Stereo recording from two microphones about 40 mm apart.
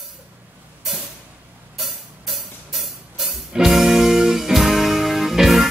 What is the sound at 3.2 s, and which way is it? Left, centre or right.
Music, centre.